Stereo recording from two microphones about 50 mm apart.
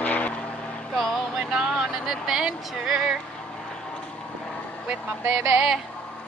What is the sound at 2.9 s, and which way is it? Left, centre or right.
Speech, centre.